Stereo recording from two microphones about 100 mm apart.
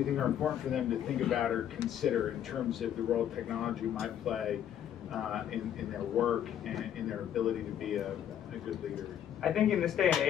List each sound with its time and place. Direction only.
0.0 s a man's voice: centre (ahead or behind)
9.4 s a man's voice: centre (ahead or behind)